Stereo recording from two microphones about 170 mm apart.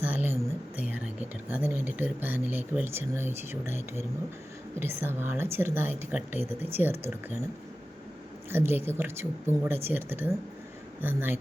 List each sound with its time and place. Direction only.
0.0 s a sound: 10° right (ahead or behind)
0.8 s speech: 10° right (ahead or behind)
8.4 s speech: 15° right (ahead or behind)